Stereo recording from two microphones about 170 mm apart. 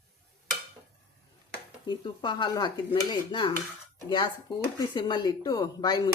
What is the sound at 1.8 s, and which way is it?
Speech, 25° left (ahead or behind).